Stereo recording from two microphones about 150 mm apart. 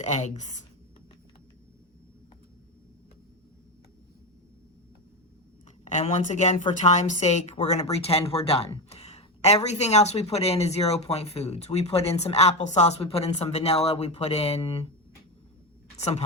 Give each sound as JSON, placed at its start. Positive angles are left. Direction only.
{"t": 0.0, "sound": "speech", "side_deg": 50}
{"t": 5.8, "sound": "speech", "side_deg": 50}
{"t": 16.0, "sound": "a woman's voice", "side_deg": 45}